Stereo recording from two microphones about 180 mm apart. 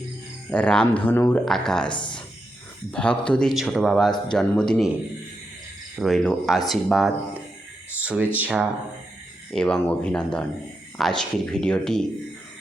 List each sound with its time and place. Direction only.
0.5 s speech: 5° left (ahead or behind)
1.9 s speech: 25° left (ahead or behind)
2.9 s speech: 5° left (ahead or behind)
6.0 s speech: centre (ahead or behind)
9.5 s speech: 5° left (ahead or behind)